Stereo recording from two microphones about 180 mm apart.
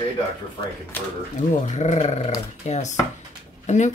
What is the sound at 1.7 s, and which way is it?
Speech, 40° left (ahead or behind).